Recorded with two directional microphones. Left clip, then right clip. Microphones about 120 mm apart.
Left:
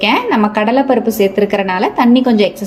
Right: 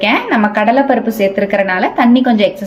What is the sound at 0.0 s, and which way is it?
A woman's voice, 45° left (ahead or behind).